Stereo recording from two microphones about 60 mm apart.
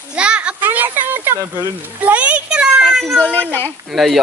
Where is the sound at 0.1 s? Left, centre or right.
Centre.